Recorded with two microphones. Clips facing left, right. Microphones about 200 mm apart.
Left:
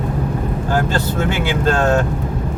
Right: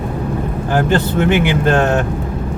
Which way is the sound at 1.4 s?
20° right (ahead or behind).